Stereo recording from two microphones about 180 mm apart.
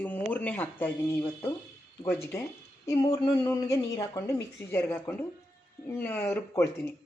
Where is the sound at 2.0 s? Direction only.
10° left (ahead or behind).